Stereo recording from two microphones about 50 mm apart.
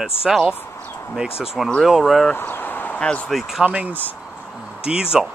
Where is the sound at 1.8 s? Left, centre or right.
Centre.